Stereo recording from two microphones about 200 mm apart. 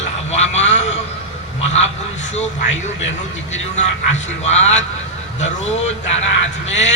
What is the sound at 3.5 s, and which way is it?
A man's voice, 35° left (ahead or behind).